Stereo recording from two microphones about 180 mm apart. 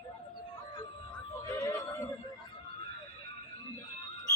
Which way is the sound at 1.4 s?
15° left (ahead or behind).